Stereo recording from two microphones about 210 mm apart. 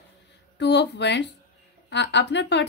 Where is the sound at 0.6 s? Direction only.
55° left (ahead or behind).